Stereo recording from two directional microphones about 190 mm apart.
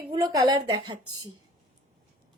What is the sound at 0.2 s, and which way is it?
Speech, 20° right (ahead or behind).